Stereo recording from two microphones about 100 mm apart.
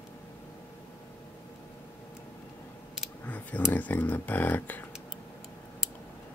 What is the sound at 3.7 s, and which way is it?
Speech, 15° left (ahead or behind).